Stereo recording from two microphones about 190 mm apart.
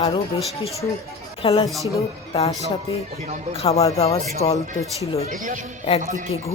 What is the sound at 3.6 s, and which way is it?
Speech, 30° left (ahead or behind).